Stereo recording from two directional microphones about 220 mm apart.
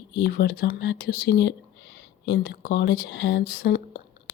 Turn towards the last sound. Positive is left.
turn(degrees=45)  # may be behind; listen again after turning